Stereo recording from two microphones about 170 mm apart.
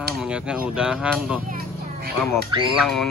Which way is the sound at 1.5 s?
65° right (ahead or behind).